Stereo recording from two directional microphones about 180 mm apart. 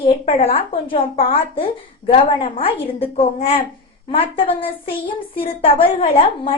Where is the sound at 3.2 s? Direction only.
35° left (ahead or behind).